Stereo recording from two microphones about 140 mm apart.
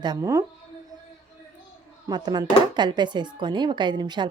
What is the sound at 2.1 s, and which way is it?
Speech, 30° right (ahead or behind).